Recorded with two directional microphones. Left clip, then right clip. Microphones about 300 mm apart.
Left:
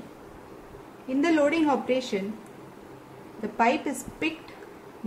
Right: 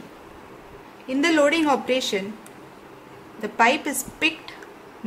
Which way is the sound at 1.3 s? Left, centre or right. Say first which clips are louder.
Right 5 dB; centre.